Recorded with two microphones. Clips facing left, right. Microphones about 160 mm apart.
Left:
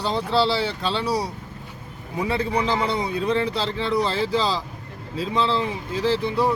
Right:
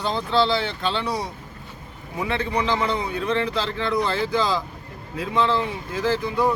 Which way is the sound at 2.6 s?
35° left (ahead or behind).